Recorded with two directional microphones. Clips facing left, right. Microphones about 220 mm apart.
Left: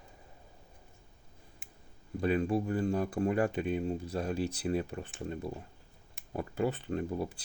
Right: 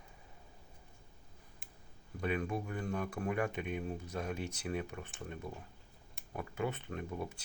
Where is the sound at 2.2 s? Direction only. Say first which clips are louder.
Left 7 dB; 35° left (ahead or behind).